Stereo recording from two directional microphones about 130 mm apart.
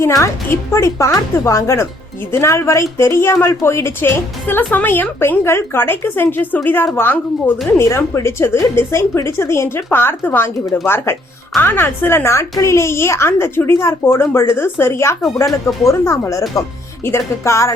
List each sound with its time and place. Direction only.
0.0 s speech: 25° left (ahead or behind)